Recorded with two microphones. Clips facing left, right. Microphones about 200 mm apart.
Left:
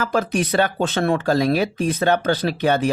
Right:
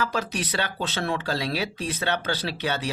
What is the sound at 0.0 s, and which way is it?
Speech, 50° left (ahead or behind).